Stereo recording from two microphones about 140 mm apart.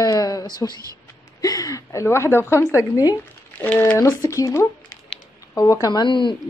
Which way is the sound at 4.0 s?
25° left (ahead or behind).